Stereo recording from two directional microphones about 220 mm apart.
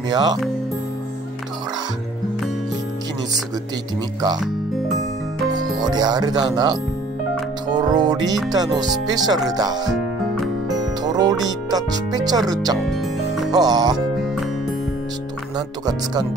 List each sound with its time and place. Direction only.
0.1 s speech: 20° right (ahead or behind)
5.5 s speech: 20° right (ahead or behind)
11.1 s music: 15° right (ahead or behind)
11.4 s speech: 15° right (ahead or behind)
12.8 s music: centre (ahead or behind)
13.5 s speech: 15° right (ahead or behind)
15.5 s speech: 20° right (ahead or behind)